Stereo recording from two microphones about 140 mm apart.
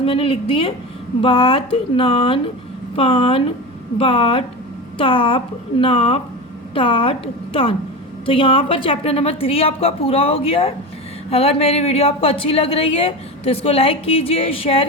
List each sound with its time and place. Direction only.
0.0 s a woman's voice: 40° left (ahead or behind)